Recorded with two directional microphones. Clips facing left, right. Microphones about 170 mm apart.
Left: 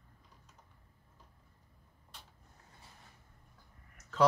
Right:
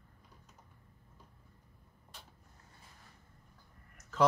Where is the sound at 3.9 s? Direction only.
5° right (ahead or behind).